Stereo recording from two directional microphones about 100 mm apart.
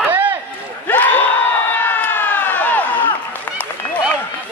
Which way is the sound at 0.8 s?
20° left (ahead or behind).